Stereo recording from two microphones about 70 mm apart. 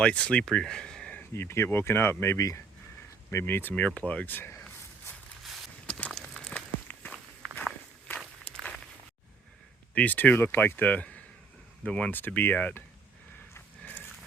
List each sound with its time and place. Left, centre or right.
0.0 s speech: centre
1.3 s speech: left
3.2 s speech: left
5.8 s a sound: centre
6.4 s walk: left
9.9 s speech: left
12.1 s speech: left